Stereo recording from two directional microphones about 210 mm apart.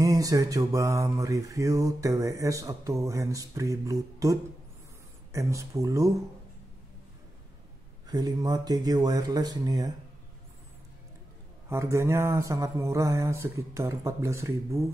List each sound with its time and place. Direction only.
0.0 s mantra: 15° right (ahead or behind)
8.1 s speech: 20° right (ahead or behind)
11.7 s mantra: 15° right (ahead or behind)